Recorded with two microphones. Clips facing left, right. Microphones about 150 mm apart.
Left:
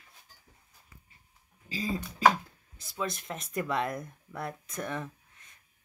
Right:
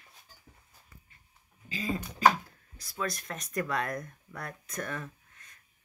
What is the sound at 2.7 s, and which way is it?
Speech, 25° left (ahead or behind).